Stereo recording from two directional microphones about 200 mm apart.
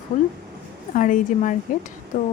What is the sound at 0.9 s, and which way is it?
Speech, 40° left (ahead or behind).